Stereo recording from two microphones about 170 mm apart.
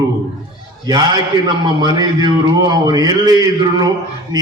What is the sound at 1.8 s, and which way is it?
A man's voice, 25° right (ahead or behind).